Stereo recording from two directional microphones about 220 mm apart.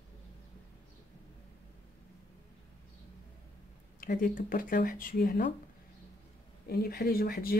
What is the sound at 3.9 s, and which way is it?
Speech, 40° left (ahead or behind).